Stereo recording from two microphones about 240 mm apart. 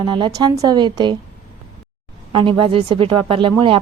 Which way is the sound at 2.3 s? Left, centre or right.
Right.